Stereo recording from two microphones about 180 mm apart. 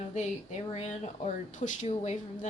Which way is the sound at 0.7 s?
35° left (ahead or behind).